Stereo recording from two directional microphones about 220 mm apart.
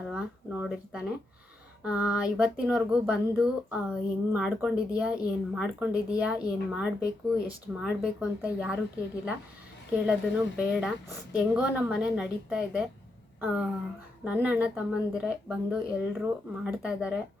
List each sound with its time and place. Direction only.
0.1 s a sound: 5° right (ahead or behind)
1.8 s speech: 5° right (ahead or behind)
9.9 s speech: 5° right (ahead or behind)
14.3 s speech: 5° right (ahead or behind)